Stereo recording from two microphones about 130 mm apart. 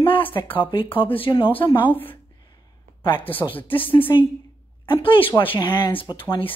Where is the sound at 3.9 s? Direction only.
40° left (ahead or behind).